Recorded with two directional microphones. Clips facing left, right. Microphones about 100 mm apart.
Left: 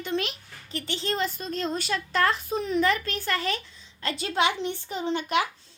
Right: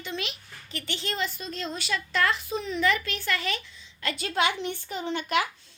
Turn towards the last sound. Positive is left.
turn(degrees=25)  # may be behind; listen again after turning